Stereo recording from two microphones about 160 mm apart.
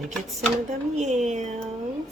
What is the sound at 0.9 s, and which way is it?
Speech, 45° right (ahead or behind).